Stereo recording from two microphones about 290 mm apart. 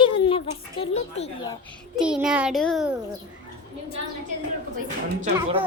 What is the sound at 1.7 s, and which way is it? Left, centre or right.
A child's voice, centre.